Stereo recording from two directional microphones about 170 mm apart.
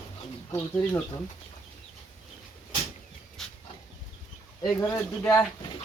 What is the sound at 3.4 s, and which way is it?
Dog, centre (ahead or behind).